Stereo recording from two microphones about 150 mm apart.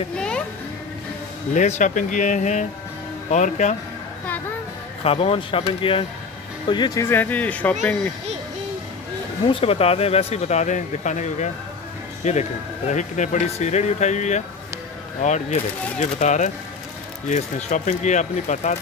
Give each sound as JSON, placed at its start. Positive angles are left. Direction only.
{"t": 1.5, "sound": "speech", "side_deg": 55}
{"t": 5.0, "sound": "speech", "side_deg": 40}
{"t": 9.5, "sound": "speech", "side_deg": 40}